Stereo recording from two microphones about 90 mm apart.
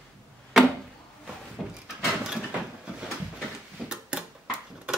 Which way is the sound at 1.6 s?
5° right (ahead or behind).